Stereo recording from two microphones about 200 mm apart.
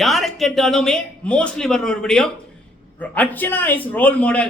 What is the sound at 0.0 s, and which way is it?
A man's voice, centre (ahead or behind).